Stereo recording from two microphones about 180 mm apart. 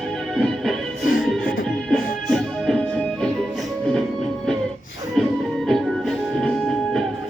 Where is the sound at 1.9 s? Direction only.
Centre (ahead or behind).